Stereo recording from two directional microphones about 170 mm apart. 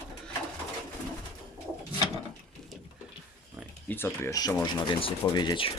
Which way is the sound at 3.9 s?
15° left (ahead or behind).